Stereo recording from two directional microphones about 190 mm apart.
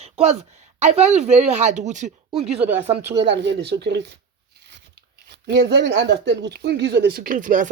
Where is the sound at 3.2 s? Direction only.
70° right (ahead or behind).